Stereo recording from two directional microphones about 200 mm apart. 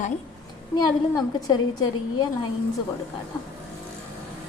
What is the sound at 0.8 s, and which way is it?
A woman's voice, 20° left (ahead or behind).